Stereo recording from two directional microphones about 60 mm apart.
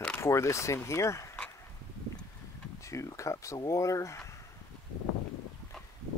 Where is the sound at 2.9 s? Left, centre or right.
Left.